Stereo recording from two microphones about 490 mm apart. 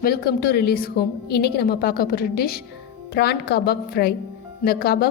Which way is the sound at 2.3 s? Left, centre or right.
Left.